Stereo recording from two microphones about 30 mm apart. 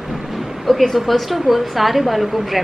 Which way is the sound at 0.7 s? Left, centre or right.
Centre.